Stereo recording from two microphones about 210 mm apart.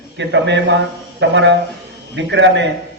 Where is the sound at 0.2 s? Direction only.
60° right (ahead or behind).